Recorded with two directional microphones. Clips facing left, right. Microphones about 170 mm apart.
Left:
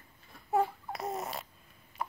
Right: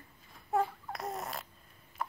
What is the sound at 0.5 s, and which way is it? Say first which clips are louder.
Babbling: left 2 dB; centre (ahead or behind).